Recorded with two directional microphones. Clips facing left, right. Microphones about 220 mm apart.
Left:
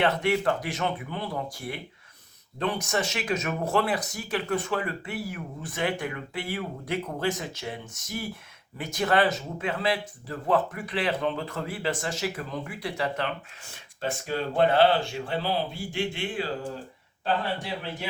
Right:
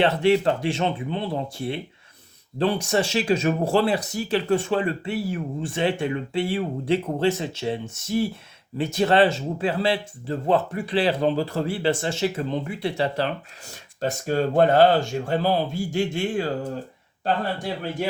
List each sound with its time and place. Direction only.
0.0 s a man's voice: 30° right (ahead or behind); by 18.1 s 45° right (ahead or behind)